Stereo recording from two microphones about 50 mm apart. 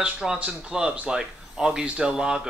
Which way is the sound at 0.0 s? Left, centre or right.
Centre.